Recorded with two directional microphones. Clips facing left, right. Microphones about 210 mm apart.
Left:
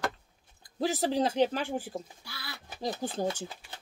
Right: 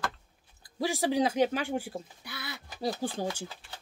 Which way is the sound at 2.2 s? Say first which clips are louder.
Right 4 dB; 20° right (ahead or behind).